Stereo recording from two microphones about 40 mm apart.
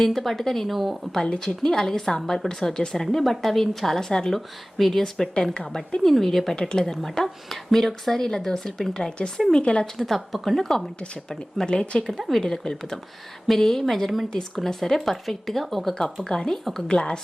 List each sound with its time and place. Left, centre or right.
0.0 s speech: centre
0.7 s speech: centre
1.1 s speech: centre
6.6 s a woman's voice: centre
6.9 s a woman's voice: centre
10.3 s speech: centre
11.0 s a woman's voice: left
16.6 s speech: centre
16.9 s a woman's voice: left